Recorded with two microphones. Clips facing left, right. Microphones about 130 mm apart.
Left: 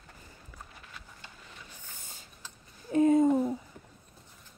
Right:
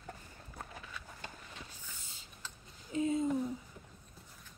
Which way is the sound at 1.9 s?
50° left (ahead or behind).